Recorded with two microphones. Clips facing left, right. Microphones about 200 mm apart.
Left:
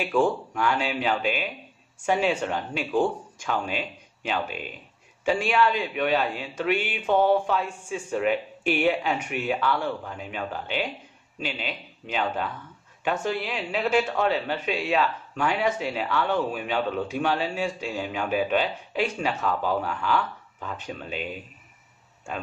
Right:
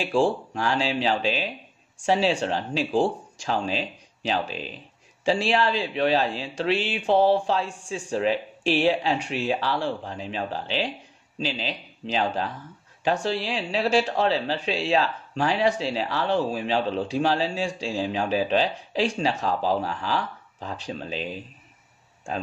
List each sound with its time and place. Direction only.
0.0 s speech: 30° right (ahead or behind)
4.3 s speech: 35° right (ahead or behind)